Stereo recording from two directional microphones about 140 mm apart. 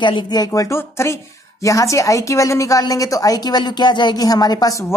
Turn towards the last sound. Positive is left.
turn(degrees=25)  # may be behind; listen again after turning